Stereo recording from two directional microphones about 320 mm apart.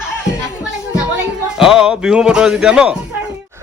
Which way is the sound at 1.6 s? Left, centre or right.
Centre.